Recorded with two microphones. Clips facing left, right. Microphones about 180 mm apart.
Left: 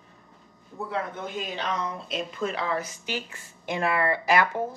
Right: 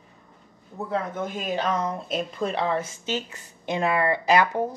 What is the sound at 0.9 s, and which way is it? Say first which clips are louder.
Speech: right 4 dB; 45° right (ahead or behind).